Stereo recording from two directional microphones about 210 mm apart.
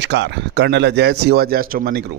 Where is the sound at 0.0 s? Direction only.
55° right (ahead or behind).